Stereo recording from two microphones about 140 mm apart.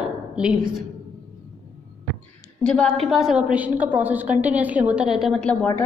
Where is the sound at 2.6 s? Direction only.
5° left (ahead or behind).